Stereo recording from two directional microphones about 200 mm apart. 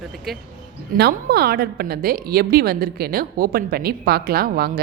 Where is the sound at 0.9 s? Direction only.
50° right (ahead or behind).